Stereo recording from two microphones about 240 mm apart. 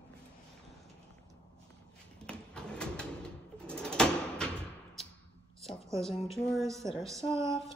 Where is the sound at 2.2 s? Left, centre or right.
Centre.